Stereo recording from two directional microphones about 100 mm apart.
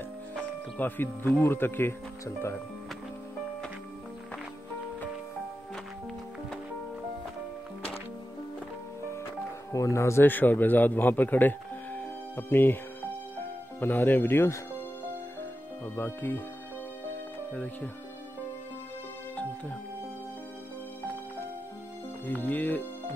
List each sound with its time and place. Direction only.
0.4 s speech: 20° left (ahead or behind)
9.7 s a man's voice: 30° left (ahead or behind)
13.7 s speech: 20° left (ahead or behind)
16.0 s speech: 20° left (ahead or behind)
22.2 s speech: 15° left (ahead or behind)